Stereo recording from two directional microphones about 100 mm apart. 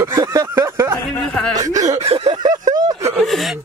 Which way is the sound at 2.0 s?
90° right.